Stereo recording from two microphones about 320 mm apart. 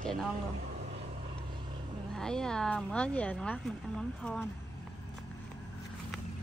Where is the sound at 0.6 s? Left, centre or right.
Right.